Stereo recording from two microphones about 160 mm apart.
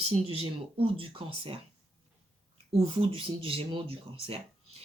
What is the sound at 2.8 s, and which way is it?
Speech, 35° right (ahead or behind).